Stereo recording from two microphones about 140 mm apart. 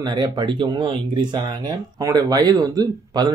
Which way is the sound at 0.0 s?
30° right (ahead or behind).